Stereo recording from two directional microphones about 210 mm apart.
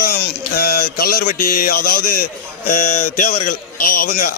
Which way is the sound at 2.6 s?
35° left (ahead or behind).